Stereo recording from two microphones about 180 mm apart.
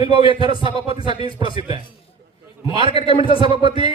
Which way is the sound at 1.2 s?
30° left (ahead or behind).